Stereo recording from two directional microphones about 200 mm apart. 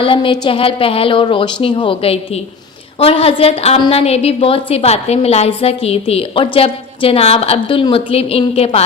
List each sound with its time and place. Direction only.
0.0 s a woman's voice: 25° left (ahead or behind)